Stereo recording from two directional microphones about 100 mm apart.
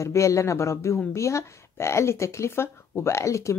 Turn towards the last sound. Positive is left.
turn(degrees=30)  # may be behind; listen again after turning